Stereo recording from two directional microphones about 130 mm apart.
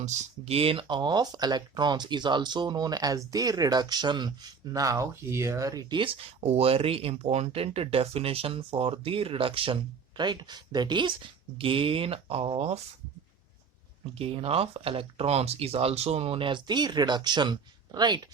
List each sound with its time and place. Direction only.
0.0 s speech: 55° right (ahead or behind); by 5.8 s 25° right (ahead or behind)
6.4 s speech: 50° right (ahead or behind)
14.2 s speech: 50° right (ahead or behind)